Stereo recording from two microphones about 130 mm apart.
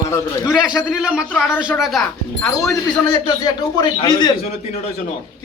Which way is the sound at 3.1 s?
30° left (ahead or behind).